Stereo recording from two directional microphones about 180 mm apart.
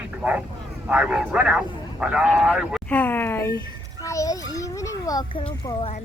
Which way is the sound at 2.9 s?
10° left (ahead or behind).